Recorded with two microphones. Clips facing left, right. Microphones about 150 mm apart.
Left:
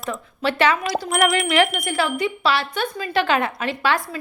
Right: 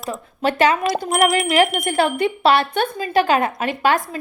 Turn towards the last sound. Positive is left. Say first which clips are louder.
# right 3 dB
turn(degrees=-45)  # may be behind; listen again after turning